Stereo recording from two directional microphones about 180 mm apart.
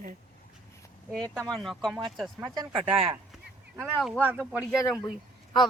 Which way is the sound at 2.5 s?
25° right (ahead or behind).